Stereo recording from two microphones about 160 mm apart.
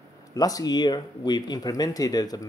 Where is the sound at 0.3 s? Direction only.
20° left (ahead or behind).